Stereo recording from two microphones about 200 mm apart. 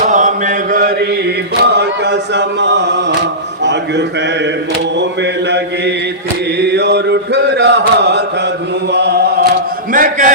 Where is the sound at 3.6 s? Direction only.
60° right (ahead or behind).